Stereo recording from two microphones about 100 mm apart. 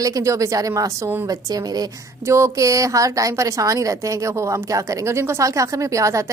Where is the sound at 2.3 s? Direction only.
30° right (ahead or behind).